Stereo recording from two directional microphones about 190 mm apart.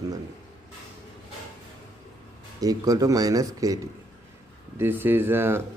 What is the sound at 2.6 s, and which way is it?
Speech, 20° right (ahead or behind).